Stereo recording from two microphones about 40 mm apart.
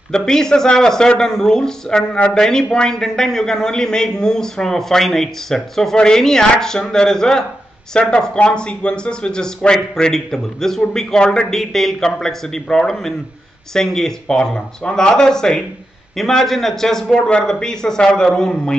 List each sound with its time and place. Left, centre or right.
0.1 s a man's voice: centre
11.5 s a man's voice: centre